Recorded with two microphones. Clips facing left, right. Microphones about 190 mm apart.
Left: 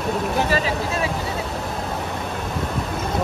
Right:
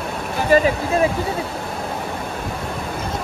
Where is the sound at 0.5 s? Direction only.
50° right (ahead or behind).